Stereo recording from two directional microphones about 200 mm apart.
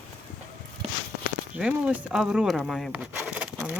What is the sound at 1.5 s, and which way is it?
Speech, 5° right (ahead or behind).